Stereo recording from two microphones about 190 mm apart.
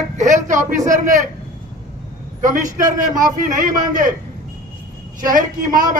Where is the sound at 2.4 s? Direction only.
45° right (ahead or behind).